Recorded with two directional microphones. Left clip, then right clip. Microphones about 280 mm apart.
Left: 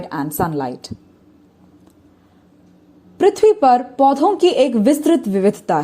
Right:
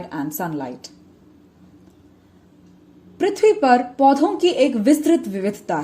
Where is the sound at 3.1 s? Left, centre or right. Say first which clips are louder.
Left 4 dB; left.